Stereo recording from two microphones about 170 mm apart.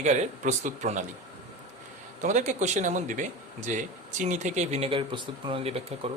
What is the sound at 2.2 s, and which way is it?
Speech, 45° right (ahead or behind).